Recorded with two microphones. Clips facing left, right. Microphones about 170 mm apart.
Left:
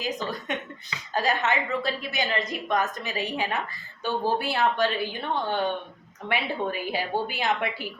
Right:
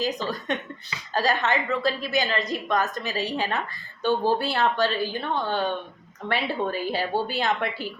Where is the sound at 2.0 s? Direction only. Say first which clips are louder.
Right 3 dB; 20° left (ahead or behind).